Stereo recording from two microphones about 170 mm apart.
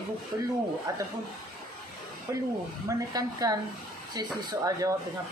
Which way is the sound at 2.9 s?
20° right (ahead or behind).